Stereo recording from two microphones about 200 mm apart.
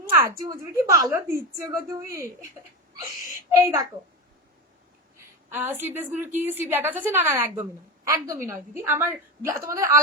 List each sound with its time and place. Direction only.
0.6 s a woman's voice: 15° right (ahead or behind)
3.5 s a woman's voice: 15° right (ahead or behind)
5.1 s a woman's voice: 10° right (ahead or behind)